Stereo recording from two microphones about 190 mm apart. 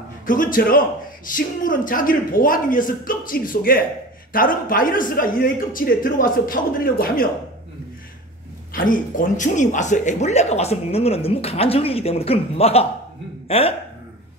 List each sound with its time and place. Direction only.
0.3 s a man's voice: 45° left (ahead or behind)
8.7 s speech: 45° left (ahead or behind)